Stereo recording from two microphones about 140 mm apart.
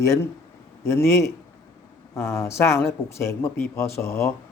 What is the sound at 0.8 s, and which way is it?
Speech, 20° left (ahead or behind).